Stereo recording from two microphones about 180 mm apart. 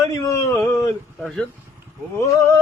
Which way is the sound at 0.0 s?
20° left (ahead or behind).